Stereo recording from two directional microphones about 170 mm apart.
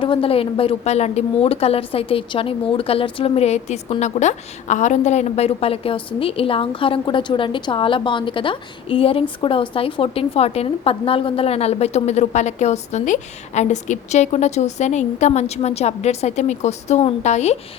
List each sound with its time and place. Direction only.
0.0 s a woman's voice: 30° left (ahead or behind)